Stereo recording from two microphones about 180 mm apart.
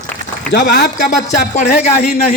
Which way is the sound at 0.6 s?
45° left (ahead or behind).